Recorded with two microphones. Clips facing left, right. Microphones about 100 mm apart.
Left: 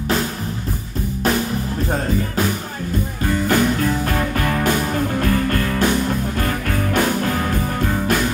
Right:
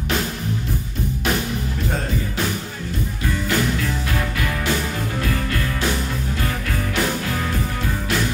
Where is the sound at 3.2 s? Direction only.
45° left (ahead or behind).